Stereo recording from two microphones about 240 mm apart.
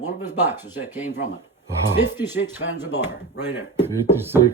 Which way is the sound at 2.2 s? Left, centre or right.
Centre.